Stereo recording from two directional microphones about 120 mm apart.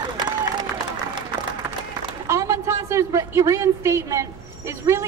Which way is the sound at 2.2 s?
25° right (ahead or behind).